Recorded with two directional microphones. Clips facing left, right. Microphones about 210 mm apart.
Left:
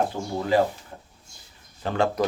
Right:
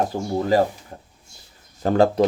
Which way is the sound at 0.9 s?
35° right (ahead or behind).